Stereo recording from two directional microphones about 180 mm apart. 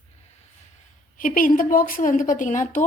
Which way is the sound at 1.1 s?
50° left (ahead or behind).